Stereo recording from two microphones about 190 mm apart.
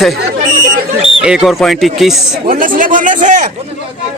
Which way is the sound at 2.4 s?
45° right (ahead or behind).